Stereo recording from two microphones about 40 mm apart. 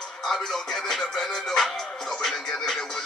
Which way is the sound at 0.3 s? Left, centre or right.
Centre.